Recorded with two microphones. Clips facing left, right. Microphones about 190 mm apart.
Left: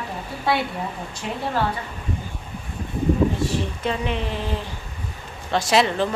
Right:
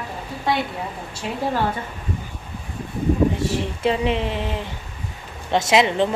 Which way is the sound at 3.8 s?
25° right (ahead or behind).